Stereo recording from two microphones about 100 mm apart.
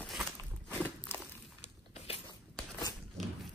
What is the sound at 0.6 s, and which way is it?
Walk, 20° left (ahead or behind).